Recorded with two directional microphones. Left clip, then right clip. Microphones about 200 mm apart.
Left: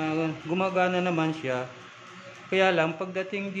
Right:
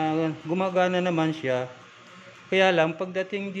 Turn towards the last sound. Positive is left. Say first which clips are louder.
# right 2 dB
turn(degrees=-25)  # may be behind; listen again after turning